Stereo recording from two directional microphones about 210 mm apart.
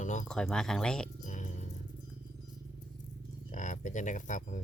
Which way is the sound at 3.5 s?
35° left (ahead or behind).